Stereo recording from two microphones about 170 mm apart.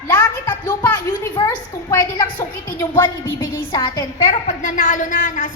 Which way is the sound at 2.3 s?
10° left (ahead or behind).